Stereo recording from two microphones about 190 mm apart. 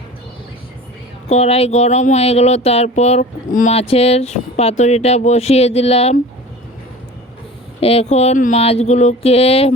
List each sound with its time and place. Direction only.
1.3 s speech: 35° left (ahead or behind)
7.8 s speech: 30° left (ahead or behind)